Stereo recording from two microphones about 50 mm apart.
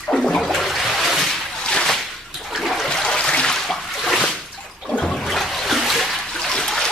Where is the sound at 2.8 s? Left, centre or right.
Centre.